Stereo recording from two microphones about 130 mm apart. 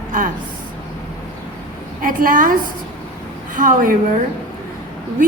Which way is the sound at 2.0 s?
90° right.